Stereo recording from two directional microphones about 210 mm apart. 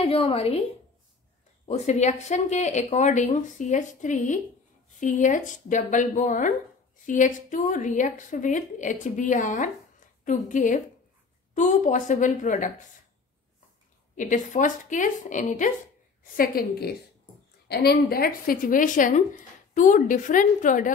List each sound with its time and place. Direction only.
0.0 s a woman's voice: 30° left (ahead or behind)
1.7 s speech: 35° left (ahead or behind)
14.1 s a woman's voice: 35° left (ahead or behind)